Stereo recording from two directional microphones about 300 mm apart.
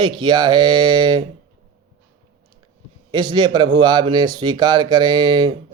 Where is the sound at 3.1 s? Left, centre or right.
Centre.